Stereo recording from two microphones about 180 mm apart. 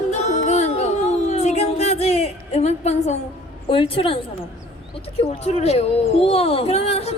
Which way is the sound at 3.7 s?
30° left (ahead or behind).